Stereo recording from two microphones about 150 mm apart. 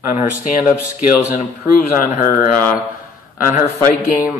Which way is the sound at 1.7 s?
65° left (ahead or behind).